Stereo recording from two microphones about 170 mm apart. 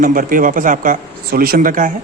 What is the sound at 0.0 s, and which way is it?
Speech, 55° right (ahead or behind).